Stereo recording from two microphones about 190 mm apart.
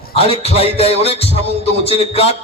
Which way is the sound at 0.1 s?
30° left (ahead or behind).